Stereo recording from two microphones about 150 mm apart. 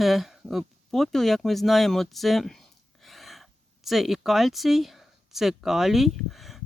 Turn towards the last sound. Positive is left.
turn(degrees=0)  # may be behind; listen again after turning